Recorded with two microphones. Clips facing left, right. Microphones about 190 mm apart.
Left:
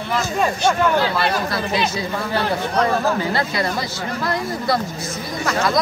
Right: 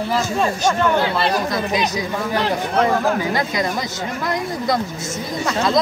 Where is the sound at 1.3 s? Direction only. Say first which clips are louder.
Right 2 dB; 15° right (ahead or behind).